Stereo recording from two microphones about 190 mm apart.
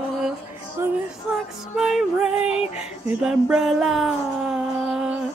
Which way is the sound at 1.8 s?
5° right (ahead or behind).